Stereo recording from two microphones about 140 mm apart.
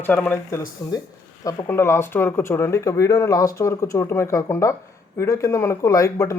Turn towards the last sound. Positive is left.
turn(degrees=25)  # may be behind; listen again after turning